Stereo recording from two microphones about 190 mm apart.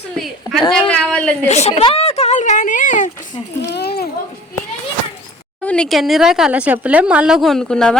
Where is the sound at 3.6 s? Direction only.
60° left (ahead or behind).